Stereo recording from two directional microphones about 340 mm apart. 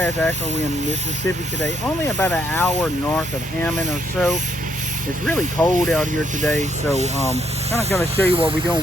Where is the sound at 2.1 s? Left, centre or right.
Centre.